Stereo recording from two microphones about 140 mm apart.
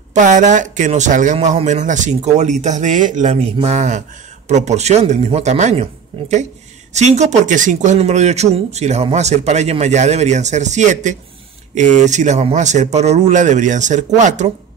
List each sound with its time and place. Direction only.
0.1 s speech: 60° right (ahead or behind)
3.3 s speech: 45° right (ahead or behind)
6.9 s speech: 55° right (ahead or behind)